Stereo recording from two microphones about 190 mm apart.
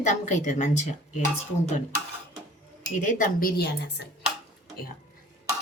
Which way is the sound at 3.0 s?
45° left (ahead or behind).